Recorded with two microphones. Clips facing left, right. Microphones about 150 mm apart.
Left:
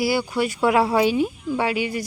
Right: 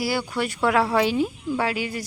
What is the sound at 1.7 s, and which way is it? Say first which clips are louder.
Speech: left 4 dB; 40° right (ahead or behind).